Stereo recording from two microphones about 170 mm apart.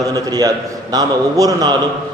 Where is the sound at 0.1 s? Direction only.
20° right (ahead or behind).